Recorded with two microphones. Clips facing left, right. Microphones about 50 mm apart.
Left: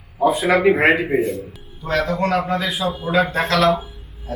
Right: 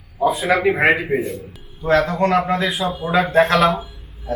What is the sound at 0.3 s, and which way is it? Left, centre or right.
A man's voice, centre.